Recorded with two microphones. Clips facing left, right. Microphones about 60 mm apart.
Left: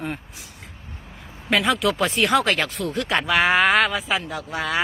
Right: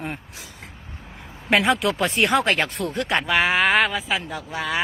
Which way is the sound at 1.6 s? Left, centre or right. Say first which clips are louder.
Even; centre.